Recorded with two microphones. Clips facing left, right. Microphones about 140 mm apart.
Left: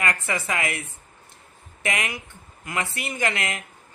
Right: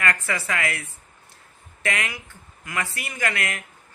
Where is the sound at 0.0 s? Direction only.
20° left (ahead or behind).